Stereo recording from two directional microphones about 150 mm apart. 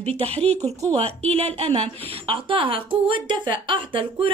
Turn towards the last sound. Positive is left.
turn(degrees=-35)  # may be behind; listen again after turning